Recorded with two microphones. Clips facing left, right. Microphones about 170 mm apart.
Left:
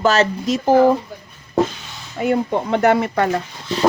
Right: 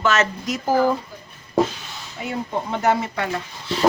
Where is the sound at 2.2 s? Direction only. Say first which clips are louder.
Left 8 dB; 60° left (ahead or behind).